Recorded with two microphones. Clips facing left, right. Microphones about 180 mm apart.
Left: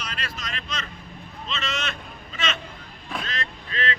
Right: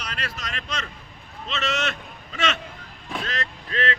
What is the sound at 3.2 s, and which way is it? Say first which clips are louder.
Vehicle: right 2 dB; 65° right (ahead or behind).